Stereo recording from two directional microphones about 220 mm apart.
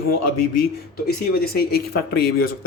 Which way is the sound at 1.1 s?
45° left (ahead or behind).